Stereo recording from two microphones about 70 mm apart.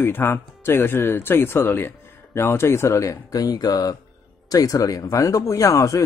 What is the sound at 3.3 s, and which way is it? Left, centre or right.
Speech, left.